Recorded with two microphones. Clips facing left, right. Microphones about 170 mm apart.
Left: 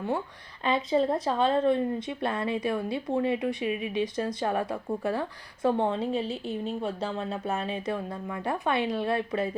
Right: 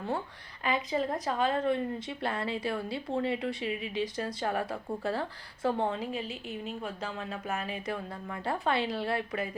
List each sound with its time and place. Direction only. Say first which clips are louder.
0.6 s a woman's voice: left 5 dB; 25° left (ahead or behind)